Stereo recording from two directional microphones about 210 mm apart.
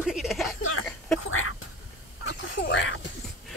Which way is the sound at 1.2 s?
75° left (ahead or behind).